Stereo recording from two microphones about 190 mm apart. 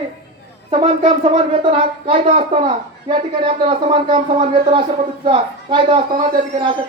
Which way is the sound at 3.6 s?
30° right (ahead or behind).